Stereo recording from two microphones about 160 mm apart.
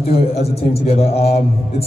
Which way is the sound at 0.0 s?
40° left (ahead or behind).